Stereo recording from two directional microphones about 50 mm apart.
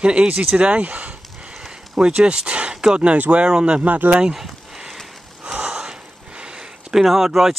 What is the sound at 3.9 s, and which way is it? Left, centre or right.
Speech, right.